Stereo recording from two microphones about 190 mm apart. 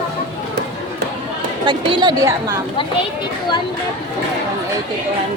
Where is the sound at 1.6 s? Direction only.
25° right (ahead or behind).